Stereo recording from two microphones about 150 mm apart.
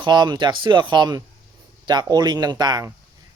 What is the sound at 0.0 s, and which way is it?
A man's voice, 30° right (ahead or behind).